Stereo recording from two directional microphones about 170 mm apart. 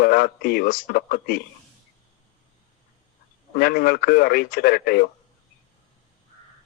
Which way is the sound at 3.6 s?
60° left (ahead or behind).